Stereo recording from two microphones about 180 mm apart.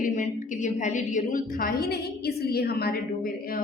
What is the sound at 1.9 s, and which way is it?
A woman's voice, 60° left (ahead or behind).